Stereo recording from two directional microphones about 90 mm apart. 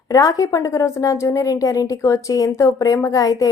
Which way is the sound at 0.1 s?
40° left (ahead or behind).